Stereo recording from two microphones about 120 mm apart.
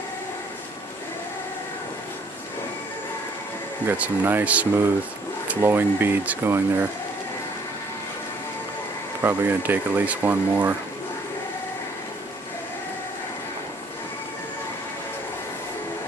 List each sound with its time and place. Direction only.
3.8 s speech: 15° right (ahead or behind)
9.2 s speech: 15° right (ahead or behind)